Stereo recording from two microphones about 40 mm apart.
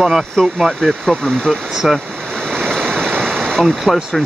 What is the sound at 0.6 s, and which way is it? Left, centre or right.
Speech, centre.